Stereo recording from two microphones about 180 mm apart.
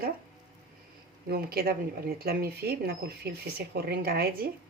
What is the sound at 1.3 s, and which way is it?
Speech, 60° right (ahead or behind).